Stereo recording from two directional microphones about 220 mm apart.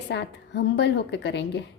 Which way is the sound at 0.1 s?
50° left (ahead or behind).